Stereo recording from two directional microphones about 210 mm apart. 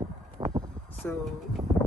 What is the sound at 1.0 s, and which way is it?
Speech, 10° left (ahead or behind).